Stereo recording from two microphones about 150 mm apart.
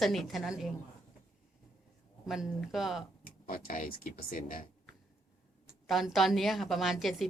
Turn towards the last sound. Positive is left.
turn(degrees=0)  # may be behind; listen again after turning